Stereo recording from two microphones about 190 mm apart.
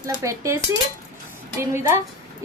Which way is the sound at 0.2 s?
15° right (ahead or behind).